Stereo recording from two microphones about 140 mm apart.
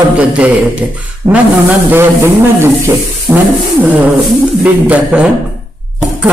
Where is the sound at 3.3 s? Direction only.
25° right (ahead or behind).